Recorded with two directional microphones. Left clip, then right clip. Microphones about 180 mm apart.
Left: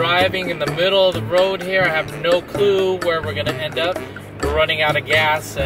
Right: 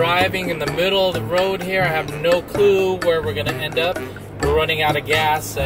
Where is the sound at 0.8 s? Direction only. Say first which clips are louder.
Left 3 dB; 30° right (ahead or behind).